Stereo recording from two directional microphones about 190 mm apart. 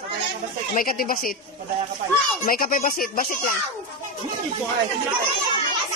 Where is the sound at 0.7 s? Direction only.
50° left (ahead or behind).